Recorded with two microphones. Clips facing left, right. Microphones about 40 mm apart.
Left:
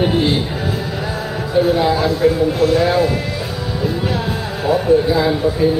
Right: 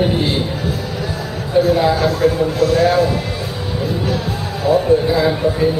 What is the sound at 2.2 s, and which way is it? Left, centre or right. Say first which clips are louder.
Speech: left 1 dB; left.